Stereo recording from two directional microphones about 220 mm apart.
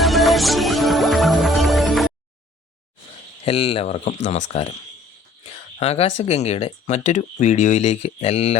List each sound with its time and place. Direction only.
0.0 s music: centre (ahead or behind)
3.4 s speech: 25° left (ahead or behind)